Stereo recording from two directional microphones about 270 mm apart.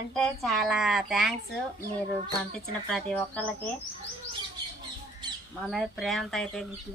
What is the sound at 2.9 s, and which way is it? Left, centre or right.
Speech, centre.